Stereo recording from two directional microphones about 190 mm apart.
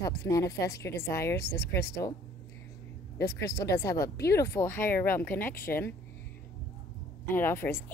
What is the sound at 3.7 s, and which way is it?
Speech, 15° left (ahead or behind).